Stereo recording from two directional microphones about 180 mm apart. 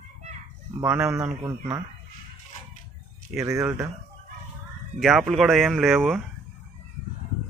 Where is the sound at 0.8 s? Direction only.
10° right (ahead or behind).